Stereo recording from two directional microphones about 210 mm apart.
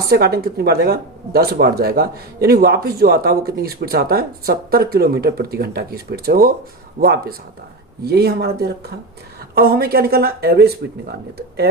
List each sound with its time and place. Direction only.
0.0 s speech: 45° right (ahead or behind)